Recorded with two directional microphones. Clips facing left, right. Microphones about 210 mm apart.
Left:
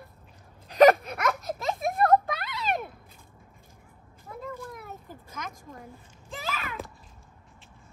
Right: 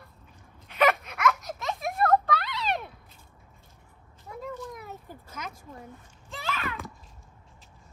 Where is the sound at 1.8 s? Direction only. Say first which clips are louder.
Left 2 dB; 45° left (ahead or behind).